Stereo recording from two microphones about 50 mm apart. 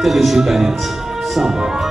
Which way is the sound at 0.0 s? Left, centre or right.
Centre.